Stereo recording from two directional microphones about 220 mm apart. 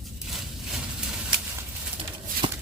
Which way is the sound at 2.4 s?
20° right (ahead or behind).